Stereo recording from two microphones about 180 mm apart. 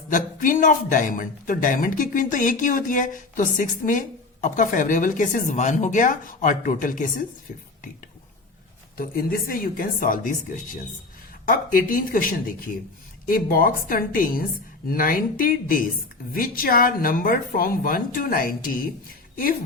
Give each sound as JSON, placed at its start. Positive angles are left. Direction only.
{"t": 0.1, "sound": "speech", "side_deg": 45}
{"t": 9.0, "sound": "speech", "side_deg": 55}